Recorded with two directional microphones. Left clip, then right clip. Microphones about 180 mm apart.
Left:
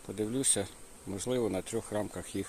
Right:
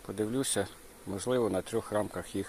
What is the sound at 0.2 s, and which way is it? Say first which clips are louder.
Speech: right 1 dB; 5° left (ahead or behind).